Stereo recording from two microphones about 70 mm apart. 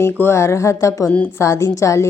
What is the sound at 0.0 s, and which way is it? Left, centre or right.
Speech, left.